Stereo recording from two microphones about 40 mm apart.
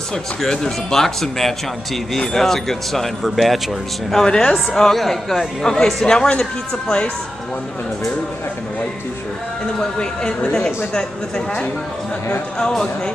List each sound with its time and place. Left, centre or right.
0.5 s speech: centre
4.1 s speech: centre
4.6 s speech: centre
6.0 s speech: left
9.8 s speech: left